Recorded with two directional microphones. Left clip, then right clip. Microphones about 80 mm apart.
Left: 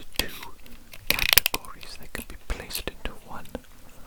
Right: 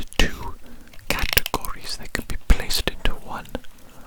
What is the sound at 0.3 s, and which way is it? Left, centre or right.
Whispering, left.